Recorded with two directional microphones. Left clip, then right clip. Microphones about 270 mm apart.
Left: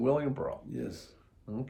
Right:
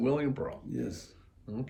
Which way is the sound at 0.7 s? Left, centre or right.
Centre.